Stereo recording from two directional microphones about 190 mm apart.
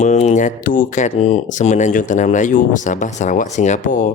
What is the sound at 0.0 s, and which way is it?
Speech, 35° left (ahead or behind).